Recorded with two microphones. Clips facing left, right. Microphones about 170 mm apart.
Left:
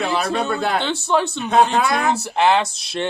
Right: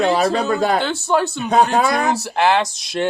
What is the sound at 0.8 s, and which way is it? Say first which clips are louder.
Speech: right 1 dB; centre (ahead or behind).